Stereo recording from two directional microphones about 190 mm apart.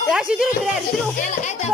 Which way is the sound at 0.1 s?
5° right (ahead or behind).